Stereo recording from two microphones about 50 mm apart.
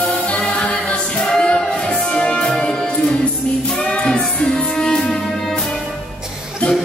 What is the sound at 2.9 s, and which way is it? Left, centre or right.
Music, left.